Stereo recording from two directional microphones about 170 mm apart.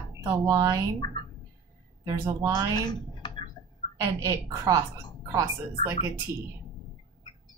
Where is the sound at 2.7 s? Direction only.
25° left (ahead or behind).